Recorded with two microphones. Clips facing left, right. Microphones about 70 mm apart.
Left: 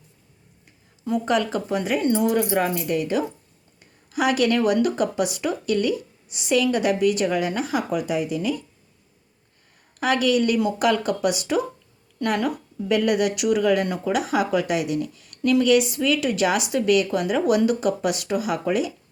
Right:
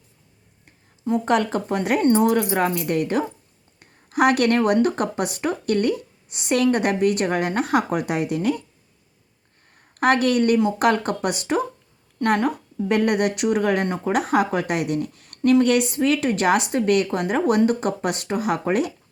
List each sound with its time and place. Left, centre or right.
1.2 s speech: right
1.8 s a woman's voice: right
10.0 s a woman's voice: right
14.1 s a woman's voice: right